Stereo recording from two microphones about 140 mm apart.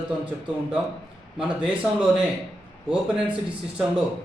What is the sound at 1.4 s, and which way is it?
Speech, 5° right (ahead or behind).